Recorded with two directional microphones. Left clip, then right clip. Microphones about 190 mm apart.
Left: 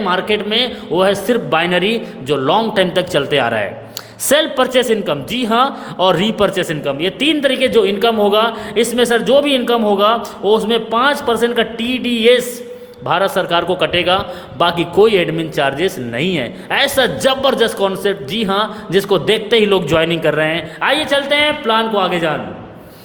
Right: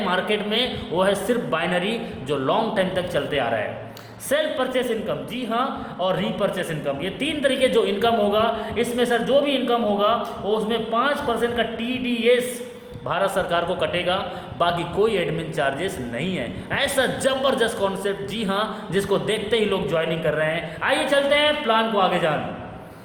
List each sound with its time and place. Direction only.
0.0 s a man's voice: 35° left (ahead or behind); by 12.4 s 55° left (ahead or behind)
13.1 s a man's voice: 40° left (ahead or behind)